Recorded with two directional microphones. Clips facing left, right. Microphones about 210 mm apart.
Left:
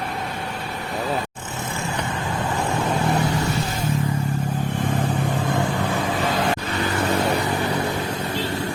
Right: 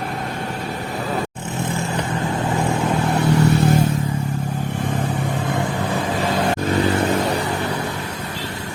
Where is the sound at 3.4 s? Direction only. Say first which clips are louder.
Right 9 dB; 60° right (ahead or behind).